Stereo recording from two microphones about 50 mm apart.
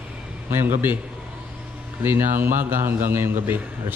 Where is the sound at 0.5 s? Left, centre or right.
Right.